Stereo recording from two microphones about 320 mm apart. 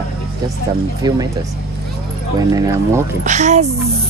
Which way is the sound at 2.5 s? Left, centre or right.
Centre.